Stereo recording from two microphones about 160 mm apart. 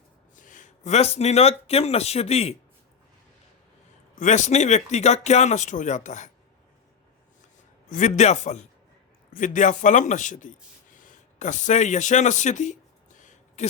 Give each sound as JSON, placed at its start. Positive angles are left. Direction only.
{"t": 0.3, "sound": "speech", "side_deg": 55}
{"t": 4.2, "sound": "speech", "side_deg": 50}
{"t": 7.9, "sound": "speech", "side_deg": 50}
{"t": 9.3, "sound": "speech", "side_deg": 55}
{"t": 13.1, "sound": "a sound", "side_deg": 50}